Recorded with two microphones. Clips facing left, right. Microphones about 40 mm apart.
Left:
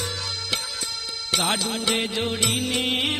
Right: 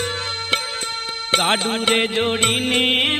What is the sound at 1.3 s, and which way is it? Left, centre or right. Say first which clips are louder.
Music: right 6 dB; right.